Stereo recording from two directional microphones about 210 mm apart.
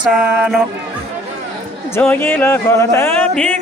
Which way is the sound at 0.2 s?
5° right (ahead or behind).